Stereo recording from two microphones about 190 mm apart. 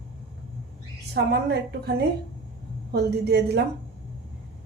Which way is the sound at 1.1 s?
55° right (ahead or behind).